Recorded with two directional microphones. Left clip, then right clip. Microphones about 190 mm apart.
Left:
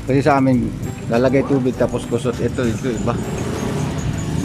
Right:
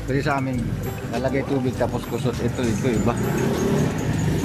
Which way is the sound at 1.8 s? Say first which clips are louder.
Left 5 dB; centre (ahead or behind).